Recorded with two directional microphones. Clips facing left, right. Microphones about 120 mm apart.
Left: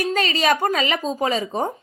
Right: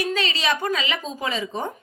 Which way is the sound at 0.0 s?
45° left (ahead or behind).